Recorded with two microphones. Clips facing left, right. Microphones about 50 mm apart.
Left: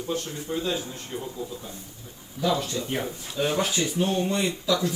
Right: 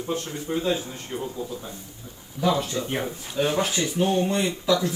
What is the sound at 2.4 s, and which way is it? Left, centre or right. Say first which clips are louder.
Speech: right 2 dB; right.